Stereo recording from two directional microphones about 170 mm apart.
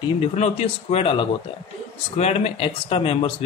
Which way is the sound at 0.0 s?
35° left (ahead or behind).